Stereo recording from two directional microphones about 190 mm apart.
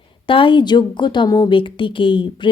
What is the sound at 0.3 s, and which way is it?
Speech, 25° left (ahead or behind).